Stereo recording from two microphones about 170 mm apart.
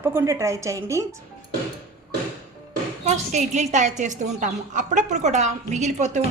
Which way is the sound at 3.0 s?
45° right (ahead or behind).